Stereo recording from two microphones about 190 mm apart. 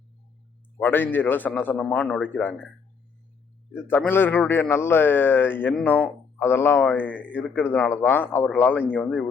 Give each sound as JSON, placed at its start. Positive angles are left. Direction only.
{"t": 0.8, "sound": "a man's voice", "side_deg": 10}
{"t": 3.8, "sound": "a man's voice", "side_deg": 10}